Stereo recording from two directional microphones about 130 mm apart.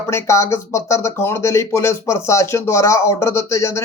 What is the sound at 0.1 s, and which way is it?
Speech, 20° left (ahead or behind).